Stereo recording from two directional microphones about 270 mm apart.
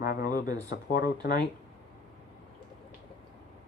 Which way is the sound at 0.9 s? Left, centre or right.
Left.